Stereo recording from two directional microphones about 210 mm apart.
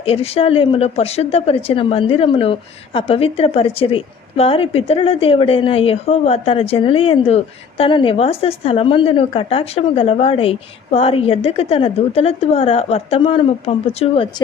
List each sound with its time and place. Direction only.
0.0 s a woman's voice: 30° left (ahead or behind)